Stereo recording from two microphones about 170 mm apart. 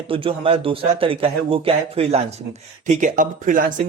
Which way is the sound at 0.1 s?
30° right (ahead or behind).